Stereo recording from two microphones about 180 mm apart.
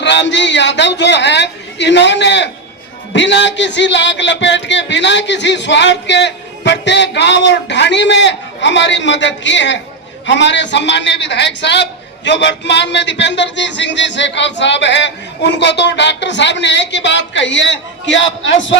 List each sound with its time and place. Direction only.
0.0 s a man's voice: 75° left (ahead or behind)